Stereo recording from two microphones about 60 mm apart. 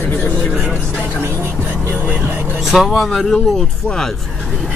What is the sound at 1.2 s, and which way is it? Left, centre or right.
Music, right.